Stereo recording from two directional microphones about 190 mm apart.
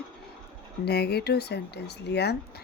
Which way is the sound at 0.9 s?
60° left (ahead or behind).